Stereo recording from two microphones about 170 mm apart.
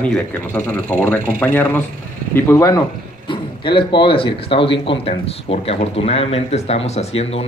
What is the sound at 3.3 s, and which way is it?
Speech, 30° left (ahead or behind).